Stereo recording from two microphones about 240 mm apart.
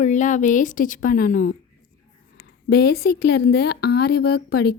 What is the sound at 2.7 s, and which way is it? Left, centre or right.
A woman's voice, left.